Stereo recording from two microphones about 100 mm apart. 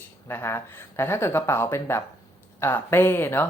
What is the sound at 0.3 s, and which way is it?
Speech, 25° left (ahead or behind).